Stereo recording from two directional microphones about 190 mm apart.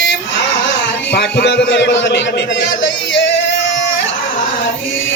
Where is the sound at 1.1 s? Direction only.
60° left (ahead or behind).